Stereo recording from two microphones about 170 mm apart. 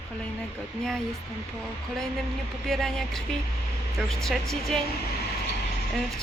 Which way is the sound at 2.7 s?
Centre (ahead or behind).